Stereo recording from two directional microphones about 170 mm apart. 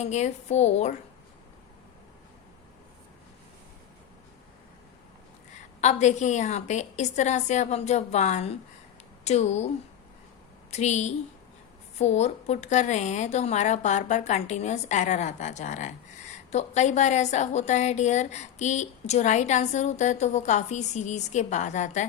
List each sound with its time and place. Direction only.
0.0 s a woman's voice: 40° left (ahead or behind)
5.8 s a woman's voice: 45° left (ahead or behind)
10.7 s a woman's voice: 40° left (ahead or behind)